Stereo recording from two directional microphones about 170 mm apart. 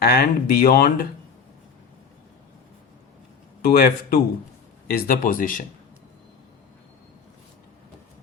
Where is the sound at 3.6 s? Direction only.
60° left (ahead or behind).